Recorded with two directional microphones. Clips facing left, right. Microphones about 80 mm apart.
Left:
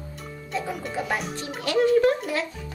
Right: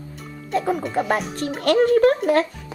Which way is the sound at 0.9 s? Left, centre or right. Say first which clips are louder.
Right 6 dB; right.